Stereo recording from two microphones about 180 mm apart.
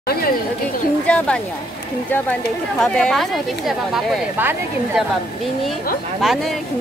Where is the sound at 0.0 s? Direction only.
60° left (ahead or behind).